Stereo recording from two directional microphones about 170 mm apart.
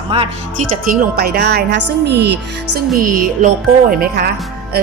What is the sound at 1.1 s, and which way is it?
A woman's voice, 65° right (ahead or behind).